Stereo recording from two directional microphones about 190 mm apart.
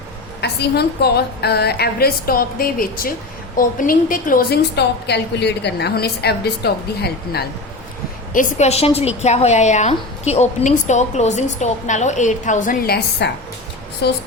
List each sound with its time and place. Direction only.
0.4 s a woman's voice: 60° left (ahead or behind)
8.3 s a woman's voice: 45° left (ahead or behind); by 13.3 s 60° left (ahead or behind)